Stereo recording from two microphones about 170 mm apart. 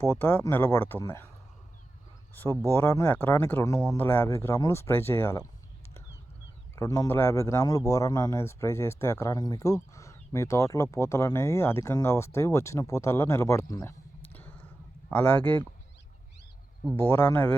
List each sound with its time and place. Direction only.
0.0 s speech: 15° left (ahead or behind)
2.3 s speech: 10° left (ahead or behind)
6.7 s speech: 20° left (ahead or behind)
17.0 s speech: 15° left (ahead or behind)